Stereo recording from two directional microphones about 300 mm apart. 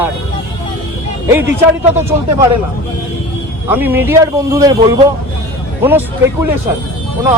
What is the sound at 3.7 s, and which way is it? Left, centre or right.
A man's voice, centre.